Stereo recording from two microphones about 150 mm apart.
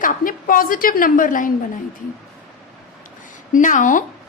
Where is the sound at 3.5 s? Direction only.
60° left (ahead or behind).